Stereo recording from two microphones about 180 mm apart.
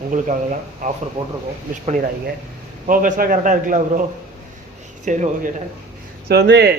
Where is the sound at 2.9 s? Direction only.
50° right (ahead or behind).